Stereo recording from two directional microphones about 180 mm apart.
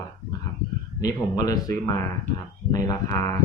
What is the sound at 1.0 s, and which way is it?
Speech, 20° left (ahead or behind).